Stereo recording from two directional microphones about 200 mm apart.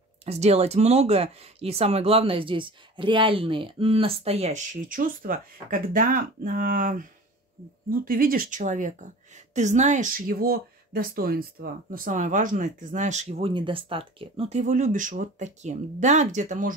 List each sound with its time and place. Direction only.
0.2 s speech: 30° right (ahead or behind)